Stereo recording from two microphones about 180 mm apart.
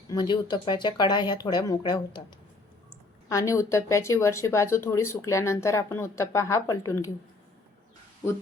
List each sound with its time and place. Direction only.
0.1 s speech: 25° left (ahead or behind)
3.2 s speech: 15° left (ahead or behind)